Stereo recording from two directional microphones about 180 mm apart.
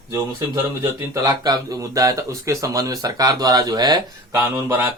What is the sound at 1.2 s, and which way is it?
Speech, 20° right (ahead or behind).